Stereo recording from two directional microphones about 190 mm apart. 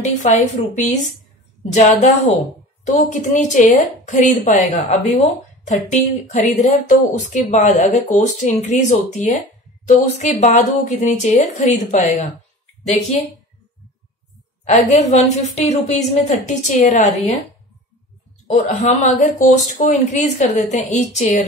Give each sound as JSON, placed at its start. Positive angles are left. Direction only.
{"t": 0.0, "sound": "speech", "side_deg": 40}
{"t": 14.6, "sound": "speech", "side_deg": 35}
{"t": 18.5, "sound": "speech", "side_deg": 40}